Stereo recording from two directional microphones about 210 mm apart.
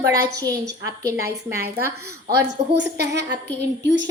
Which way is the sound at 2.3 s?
55° right (ahead or behind).